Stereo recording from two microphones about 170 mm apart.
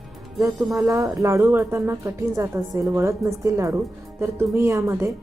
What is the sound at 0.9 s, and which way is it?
A woman's voice, 20° right (ahead or behind).